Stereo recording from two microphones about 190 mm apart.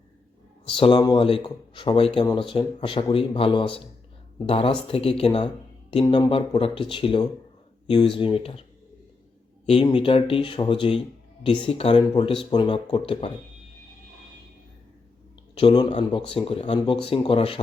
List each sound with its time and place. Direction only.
0.7 s speech: 30° left (ahead or behind)
9.6 s speech: 25° left (ahead or behind)
15.6 s speech: 25° left (ahead or behind)